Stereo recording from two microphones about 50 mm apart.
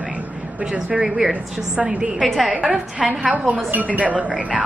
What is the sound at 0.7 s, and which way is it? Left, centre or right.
A woman's voice, centre.